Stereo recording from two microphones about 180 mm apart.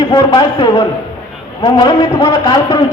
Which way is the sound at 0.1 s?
25° left (ahead or behind).